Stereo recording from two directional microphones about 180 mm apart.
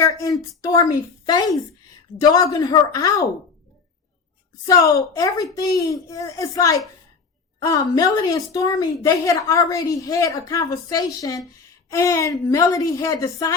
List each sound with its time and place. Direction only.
0.0 s a sound: 20° left (ahead or behind)
0.6 s a woman's voice: 20° left (ahead or behind)
4.6 s a woman's voice: 20° left (ahead or behind)